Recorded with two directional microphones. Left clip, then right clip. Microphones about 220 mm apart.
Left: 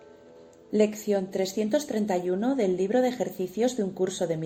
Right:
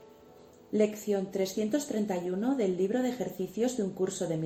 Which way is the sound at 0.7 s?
35° left (ahead or behind).